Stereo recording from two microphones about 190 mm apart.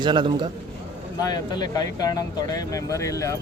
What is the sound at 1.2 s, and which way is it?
Speech, 20° left (ahead or behind).